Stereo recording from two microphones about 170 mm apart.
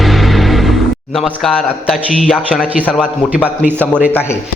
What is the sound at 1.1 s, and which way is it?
Speech, centre (ahead or behind).